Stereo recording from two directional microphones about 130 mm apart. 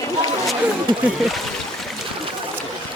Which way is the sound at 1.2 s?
Centre (ahead or behind).